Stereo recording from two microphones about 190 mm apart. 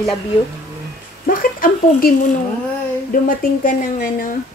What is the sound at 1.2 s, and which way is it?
Speech, 50° left (ahead or behind).